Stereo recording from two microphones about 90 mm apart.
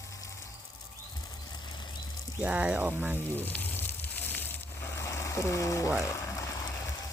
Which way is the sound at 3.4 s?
20° left (ahead or behind).